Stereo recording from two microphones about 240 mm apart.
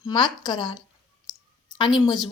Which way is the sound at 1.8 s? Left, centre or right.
Centre.